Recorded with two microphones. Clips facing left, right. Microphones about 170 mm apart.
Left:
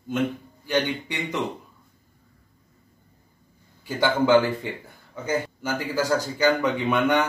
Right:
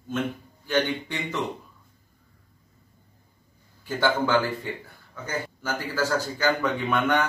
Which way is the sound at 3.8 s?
15° left (ahead or behind).